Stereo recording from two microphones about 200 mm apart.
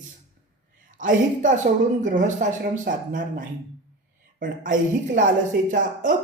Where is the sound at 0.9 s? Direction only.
40° right (ahead or behind).